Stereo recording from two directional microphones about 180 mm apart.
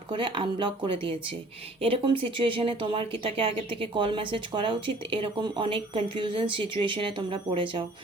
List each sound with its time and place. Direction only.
0.1 s speech: 25° right (ahead or behind)